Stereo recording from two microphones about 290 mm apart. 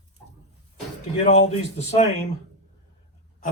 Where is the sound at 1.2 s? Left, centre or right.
Left.